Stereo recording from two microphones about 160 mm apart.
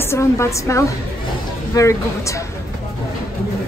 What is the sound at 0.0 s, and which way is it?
A woman's voice, 15° left (ahead or behind).